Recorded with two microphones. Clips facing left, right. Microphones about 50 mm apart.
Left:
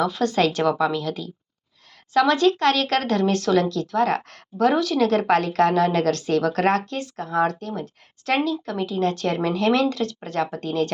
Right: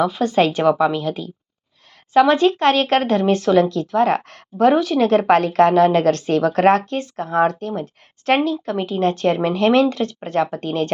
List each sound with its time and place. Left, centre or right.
0.0 s a woman's voice: centre; by 10.9 s right